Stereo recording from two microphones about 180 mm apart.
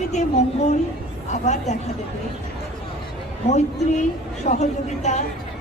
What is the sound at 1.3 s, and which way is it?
Speech, 40° left (ahead or behind).